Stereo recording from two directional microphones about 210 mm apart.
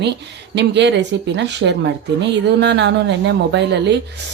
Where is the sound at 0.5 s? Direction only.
55° right (ahead or behind).